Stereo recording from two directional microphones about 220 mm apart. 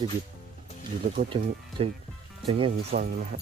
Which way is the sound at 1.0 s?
30° right (ahead or behind).